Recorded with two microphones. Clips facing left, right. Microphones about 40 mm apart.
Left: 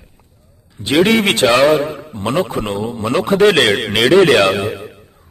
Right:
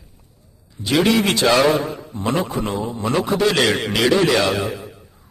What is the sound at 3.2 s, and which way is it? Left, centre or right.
A man's voice, left.